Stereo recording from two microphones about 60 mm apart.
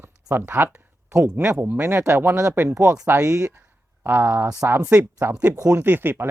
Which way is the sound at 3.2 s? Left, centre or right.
Right.